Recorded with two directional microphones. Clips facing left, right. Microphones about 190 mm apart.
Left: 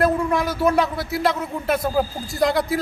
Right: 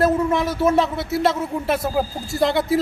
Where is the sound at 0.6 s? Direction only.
25° right (ahead or behind).